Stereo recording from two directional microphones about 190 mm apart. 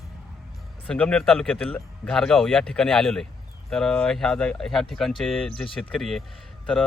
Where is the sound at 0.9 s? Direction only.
5° left (ahead or behind).